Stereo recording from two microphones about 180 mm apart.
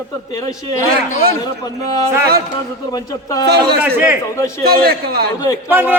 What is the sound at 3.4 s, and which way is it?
Speech, 65° right (ahead or behind).